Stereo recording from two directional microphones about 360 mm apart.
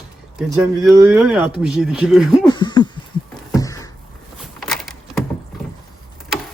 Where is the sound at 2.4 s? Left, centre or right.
Centre.